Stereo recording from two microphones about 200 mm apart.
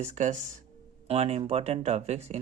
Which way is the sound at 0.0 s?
35° right (ahead or behind).